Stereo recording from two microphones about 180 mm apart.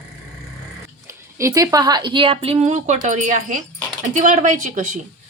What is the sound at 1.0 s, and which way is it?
A woman's voice, 15° right (ahead or behind).